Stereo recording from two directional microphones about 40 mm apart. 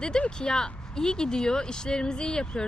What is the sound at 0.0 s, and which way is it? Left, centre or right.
Speech, centre.